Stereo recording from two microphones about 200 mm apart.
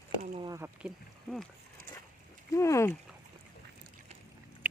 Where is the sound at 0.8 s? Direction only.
Centre (ahead or behind).